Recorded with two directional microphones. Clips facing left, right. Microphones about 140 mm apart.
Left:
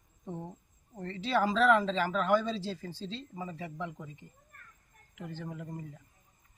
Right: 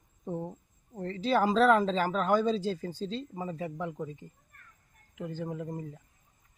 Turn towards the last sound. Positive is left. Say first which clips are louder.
# right 5 dB
turn(degrees=-20)  # may be behind; listen again after turning